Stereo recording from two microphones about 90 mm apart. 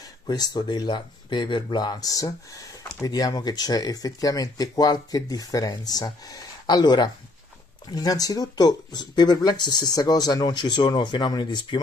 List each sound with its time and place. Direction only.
0.0 s speech: 45° left (ahead or behind)